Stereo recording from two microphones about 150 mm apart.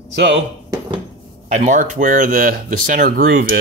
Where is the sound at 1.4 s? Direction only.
55° right (ahead or behind).